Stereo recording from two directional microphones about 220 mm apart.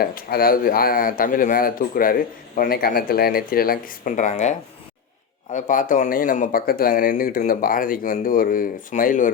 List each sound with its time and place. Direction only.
0.0 s speech: 40° left (ahead or behind)